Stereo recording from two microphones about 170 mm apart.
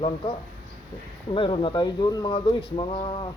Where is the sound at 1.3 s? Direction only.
30° left (ahead or behind).